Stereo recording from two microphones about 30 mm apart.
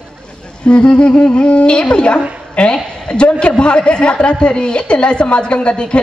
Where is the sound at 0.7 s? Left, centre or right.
Left.